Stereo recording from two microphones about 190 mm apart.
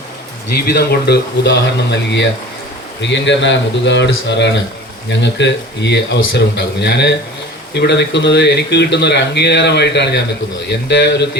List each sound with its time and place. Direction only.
0.5 s speech: 55° left (ahead or behind)